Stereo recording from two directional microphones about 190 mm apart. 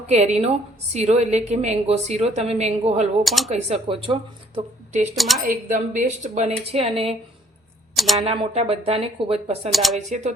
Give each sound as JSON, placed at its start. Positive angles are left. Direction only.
{"t": 0.1, "sound": "a woman's voice", "side_deg": -35}
{"t": 3.2, "sound": "speech", "side_deg": 0}
{"t": 3.5, "sound": "speech", "side_deg": -30}
{"t": 5.1, "sound": "speech", "side_deg": 0}
{"t": 5.5, "sound": "a woman's voice", "side_deg": -45}
{"t": 7.9, "sound": "speech", "side_deg": 0}
{"t": 8.2, "sound": "a woman's voice", "side_deg": -35}
{"t": 9.7, "sound": "speech", "side_deg": 0}